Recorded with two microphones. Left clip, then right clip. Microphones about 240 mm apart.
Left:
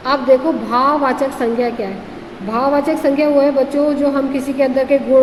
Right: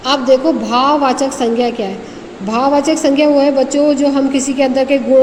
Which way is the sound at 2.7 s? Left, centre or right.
Right.